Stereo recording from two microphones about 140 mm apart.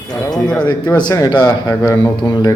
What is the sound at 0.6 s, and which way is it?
Speech, 30° left (ahead or behind).